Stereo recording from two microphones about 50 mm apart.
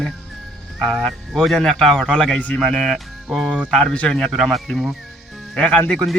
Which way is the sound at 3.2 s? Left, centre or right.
Centre.